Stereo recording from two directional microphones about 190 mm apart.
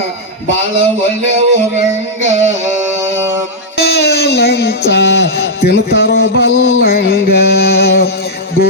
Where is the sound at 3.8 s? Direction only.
60° left (ahead or behind).